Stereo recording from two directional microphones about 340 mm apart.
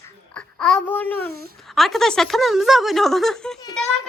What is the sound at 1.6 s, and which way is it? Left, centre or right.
Speech, centre.